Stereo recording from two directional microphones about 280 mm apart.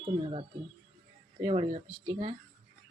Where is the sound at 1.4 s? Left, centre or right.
Centre.